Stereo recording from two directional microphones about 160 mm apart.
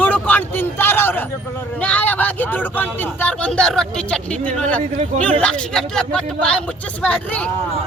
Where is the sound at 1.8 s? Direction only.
10° left (ahead or behind).